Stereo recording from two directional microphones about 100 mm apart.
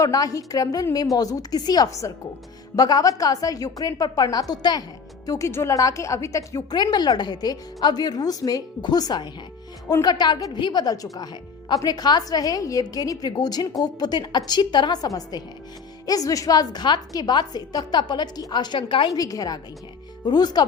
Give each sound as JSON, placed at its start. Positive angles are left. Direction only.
{"t": 0.0, "sound": "a woman's voice", "side_deg": 35}
{"t": 19.1, "sound": "a woman's voice", "side_deg": 35}